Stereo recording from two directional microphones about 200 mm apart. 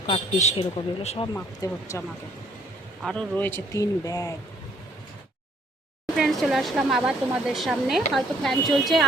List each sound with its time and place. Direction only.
0.1 s a man's voice: 30° left (ahead or behind)
1.3 s speech: 15° left (ahead or behind)
3.0 s speech: centre (ahead or behind)
6.1 s speech: centre (ahead or behind)